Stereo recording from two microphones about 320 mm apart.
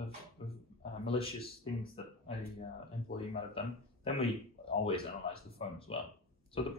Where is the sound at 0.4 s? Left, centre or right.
Centre.